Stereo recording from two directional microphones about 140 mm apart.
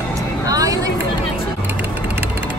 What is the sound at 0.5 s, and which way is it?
Vehicle, 25° right (ahead or behind).